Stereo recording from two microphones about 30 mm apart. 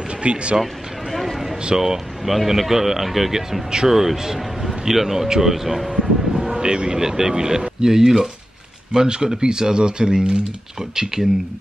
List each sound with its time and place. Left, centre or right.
0.2 s speech: right
1.1 s a sound: centre
1.7 s speech: centre
2.2 s a man's voice: centre
6.1 s a sound: centre
6.6 s speech: right